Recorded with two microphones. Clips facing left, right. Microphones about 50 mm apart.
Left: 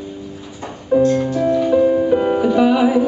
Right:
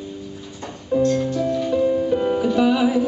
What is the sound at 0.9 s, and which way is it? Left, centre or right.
Music, centre.